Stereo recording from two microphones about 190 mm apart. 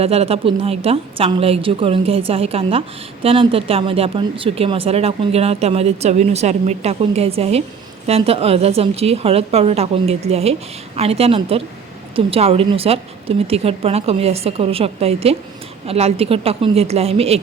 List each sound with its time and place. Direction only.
0.0 s speech: 30° right (ahead or behind)